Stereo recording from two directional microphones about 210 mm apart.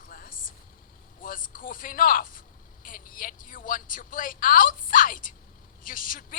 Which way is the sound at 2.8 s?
40° left (ahead or behind).